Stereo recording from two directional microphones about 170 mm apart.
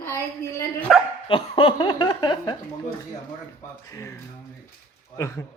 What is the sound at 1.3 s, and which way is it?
Laughter, 30° left (ahead or behind).